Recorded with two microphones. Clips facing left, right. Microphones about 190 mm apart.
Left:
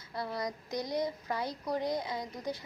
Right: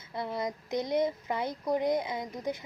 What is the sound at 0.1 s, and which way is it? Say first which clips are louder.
Speech: right 3 dB; 20° right (ahead or behind).